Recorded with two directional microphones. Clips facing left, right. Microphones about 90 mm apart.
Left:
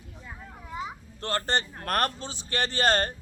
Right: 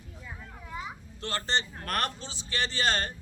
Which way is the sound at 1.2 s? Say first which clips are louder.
Left 3 dB; 45° left (ahead or behind).